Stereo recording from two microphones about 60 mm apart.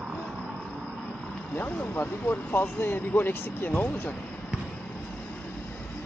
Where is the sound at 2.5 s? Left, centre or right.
Left.